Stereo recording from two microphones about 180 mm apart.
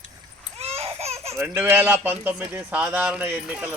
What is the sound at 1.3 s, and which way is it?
Speech, 10° right (ahead or behind).